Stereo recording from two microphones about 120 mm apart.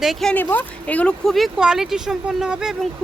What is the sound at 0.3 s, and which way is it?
A woman's voice, 15° left (ahead or behind).